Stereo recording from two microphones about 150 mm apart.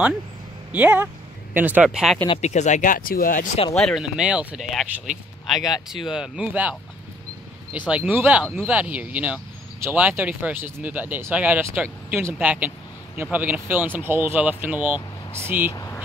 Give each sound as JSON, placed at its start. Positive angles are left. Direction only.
{"t": 0.7, "sound": "speech", "side_deg": -10}
{"t": 2.2, "sound": "speech", "side_deg": 45}
{"t": 3.7, "sound": "speech", "side_deg": 0}
{"t": 7.9, "sound": "speech", "side_deg": -10}
{"t": 15.0, "sound": "speech", "side_deg": 30}